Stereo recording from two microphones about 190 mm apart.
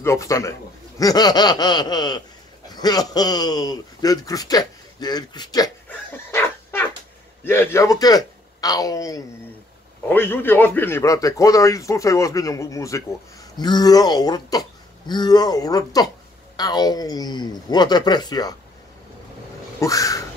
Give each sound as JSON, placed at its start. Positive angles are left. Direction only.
{"t": 0.0, "sound": "speech", "side_deg": 15}
{"t": 5.9, "sound": "dog", "side_deg": 10}
{"t": 7.4, "sound": "a man's voice", "side_deg": 10}
{"t": 19.8, "sound": "a man's voice", "side_deg": 15}